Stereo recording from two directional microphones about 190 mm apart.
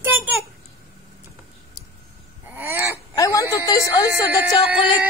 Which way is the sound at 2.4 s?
10° right (ahead or behind).